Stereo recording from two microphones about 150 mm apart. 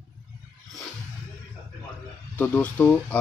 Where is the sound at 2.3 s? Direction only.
10° left (ahead or behind).